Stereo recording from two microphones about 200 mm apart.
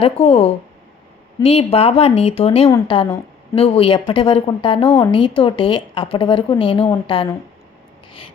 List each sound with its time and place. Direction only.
0.0 s a woman's voice: 30° left (ahead or behind)